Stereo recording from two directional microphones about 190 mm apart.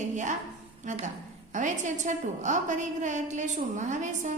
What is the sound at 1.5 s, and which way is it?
A woman's voice, 40° right (ahead or behind).